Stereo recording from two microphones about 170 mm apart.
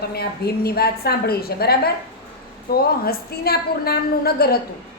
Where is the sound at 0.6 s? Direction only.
65° left (ahead or behind).